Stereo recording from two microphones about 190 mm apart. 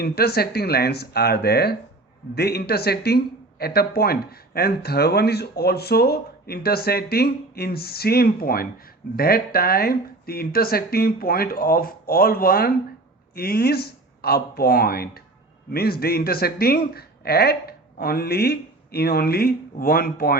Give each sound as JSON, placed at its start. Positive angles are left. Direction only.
{"t": 0.0, "sound": "speech", "side_deg": 55}